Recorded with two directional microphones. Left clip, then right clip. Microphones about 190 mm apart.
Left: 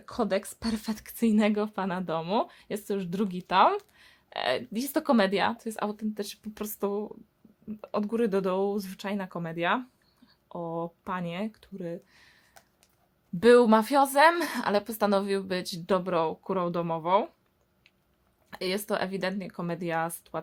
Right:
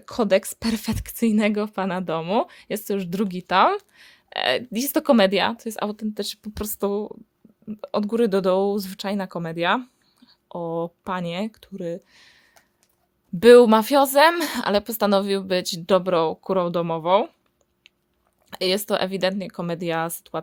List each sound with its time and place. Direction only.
0.0 s speech: 55° right (ahead or behind)
12.0 s a sound: 50° right (ahead or behind)
13.4 s speech: 50° right (ahead or behind)
18.5 s speech: 50° right (ahead or behind)